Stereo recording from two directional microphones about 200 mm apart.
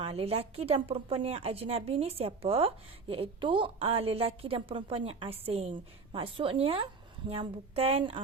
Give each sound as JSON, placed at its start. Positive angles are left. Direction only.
{"t": 0.0, "sound": "a woman's voice", "side_deg": -30}